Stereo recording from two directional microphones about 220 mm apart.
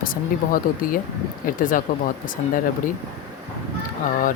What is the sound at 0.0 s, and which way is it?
Speech, 40° left (ahead or behind).